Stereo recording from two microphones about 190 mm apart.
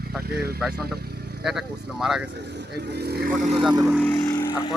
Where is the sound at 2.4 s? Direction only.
60° right (ahead or behind).